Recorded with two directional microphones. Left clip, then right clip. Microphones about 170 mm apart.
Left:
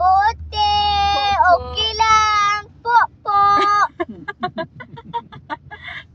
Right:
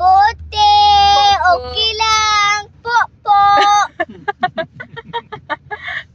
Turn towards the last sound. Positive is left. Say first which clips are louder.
# right 7 dB
turn(degrees=-35)  # may be behind; listen again after turning